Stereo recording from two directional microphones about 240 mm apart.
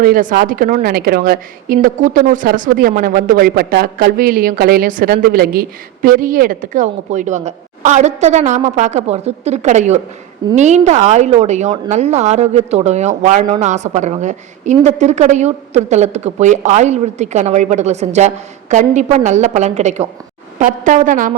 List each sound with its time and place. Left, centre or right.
0.0 s a woman's voice: right